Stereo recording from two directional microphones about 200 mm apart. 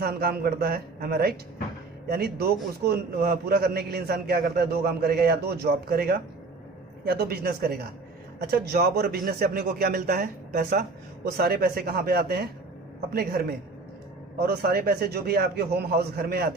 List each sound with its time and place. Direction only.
0.0 s a man's voice: 50° right (ahead or behind)
14.4 s a man's voice: 50° right (ahead or behind)